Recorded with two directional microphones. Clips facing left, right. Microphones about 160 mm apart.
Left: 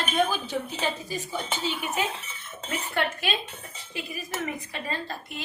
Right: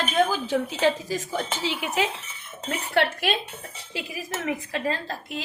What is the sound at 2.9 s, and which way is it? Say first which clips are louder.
Speech: right 6 dB; 75° right (ahead or behind).